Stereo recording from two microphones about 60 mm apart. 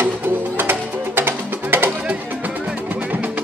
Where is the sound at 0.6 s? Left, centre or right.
Right.